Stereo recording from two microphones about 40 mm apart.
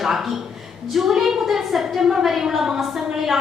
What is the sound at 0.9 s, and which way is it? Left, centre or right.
A woman's voice, centre.